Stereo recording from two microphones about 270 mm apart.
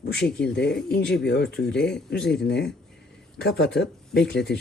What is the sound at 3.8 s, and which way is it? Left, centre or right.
Speech, centre.